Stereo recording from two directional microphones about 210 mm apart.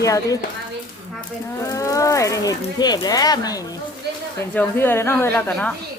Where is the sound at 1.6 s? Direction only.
15° left (ahead or behind).